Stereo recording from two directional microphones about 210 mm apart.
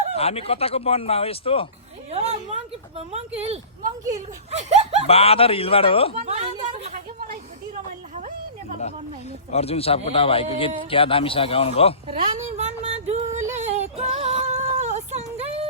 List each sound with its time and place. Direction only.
0.2 s speech: 30° left (ahead or behind)
2.1 s a woman's voice: 30° right (ahead or behind)
4.7 s speech: 30° right (ahead or behind)
5.0 s speech: 30° left (ahead or behind)
6.1 s speech: 30° right (ahead or behind)
9.5 s speech: 30° left (ahead or behind)
12.0 s a sound: 30° right (ahead or behind)
13.6 s female singing: 30° right (ahead or behind)